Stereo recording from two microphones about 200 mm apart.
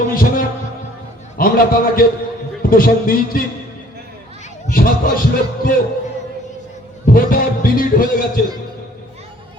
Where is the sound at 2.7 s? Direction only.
45° left (ahead or behind).